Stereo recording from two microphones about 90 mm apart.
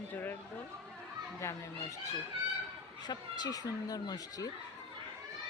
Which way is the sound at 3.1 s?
50° left (ahead or behind).